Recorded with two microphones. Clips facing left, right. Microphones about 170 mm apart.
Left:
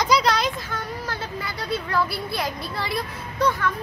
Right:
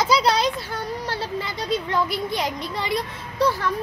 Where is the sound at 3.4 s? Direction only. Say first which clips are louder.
Right 1 dB; 30° right (ahead or behind).